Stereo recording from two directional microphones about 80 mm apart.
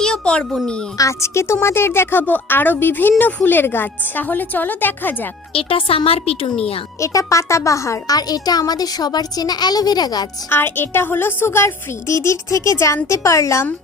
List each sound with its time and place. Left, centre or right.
0.0 s a sound: centre
0.6 s speech: centre
0.9 s a woman's voice: left
7.0 s a woman's voice: left
10.5 s a woman's voice: left